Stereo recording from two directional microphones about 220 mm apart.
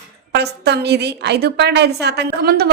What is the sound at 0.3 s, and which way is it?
A woman's voice, 50° right (ahead or behind).